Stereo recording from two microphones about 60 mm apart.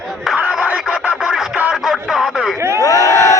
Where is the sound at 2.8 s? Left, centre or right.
Left.